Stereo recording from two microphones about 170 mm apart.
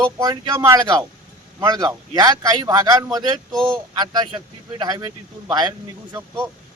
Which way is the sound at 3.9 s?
25° right (ahead or behind).